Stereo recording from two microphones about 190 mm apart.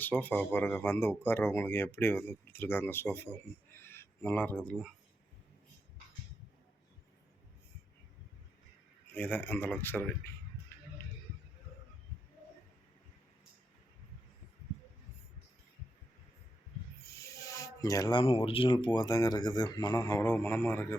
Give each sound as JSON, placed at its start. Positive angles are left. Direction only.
{"t": 0.2, "sound": "speech", "side_deg": 10}
{"t": 3.8, "sound": "a sound", "side_deg": 15}
{"t": 9.1, "sound": "speech", "side_deg": 10}
{"t": 17.2, "sound": "speech", "side_deg": 15}